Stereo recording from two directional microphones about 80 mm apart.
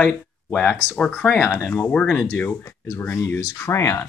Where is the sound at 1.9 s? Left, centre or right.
Centre.